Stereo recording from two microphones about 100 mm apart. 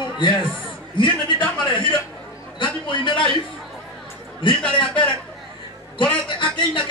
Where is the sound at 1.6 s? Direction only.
55° left (ahead or behind).